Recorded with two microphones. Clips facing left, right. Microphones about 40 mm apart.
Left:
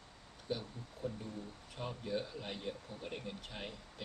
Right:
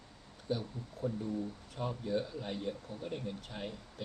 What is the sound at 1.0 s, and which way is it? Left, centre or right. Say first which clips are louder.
Speech: right 7 dB; centre.